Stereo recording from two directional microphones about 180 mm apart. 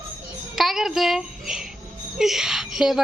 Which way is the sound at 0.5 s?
Centre (ahead or behind).